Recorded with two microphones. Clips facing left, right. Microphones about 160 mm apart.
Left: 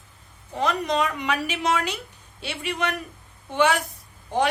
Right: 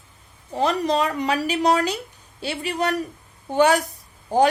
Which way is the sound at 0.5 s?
35° right (ahead or behind).